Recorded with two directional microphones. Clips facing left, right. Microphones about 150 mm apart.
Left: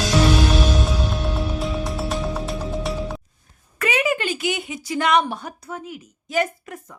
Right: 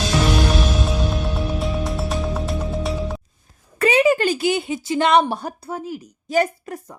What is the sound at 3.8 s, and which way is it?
Speech, 30° right (ahead or behind).